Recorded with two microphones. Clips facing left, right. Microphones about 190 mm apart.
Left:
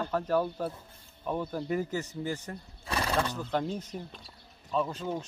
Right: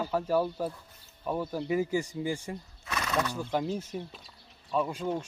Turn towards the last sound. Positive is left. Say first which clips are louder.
# right 1 dB
turn(degrees=-10)  # may be behind; listen again after turning